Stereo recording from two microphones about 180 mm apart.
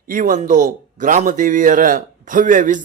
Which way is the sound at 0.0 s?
50° right (ahead or behind).